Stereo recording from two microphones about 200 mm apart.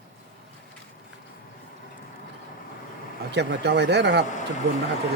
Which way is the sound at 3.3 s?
55° right (ahead or behind).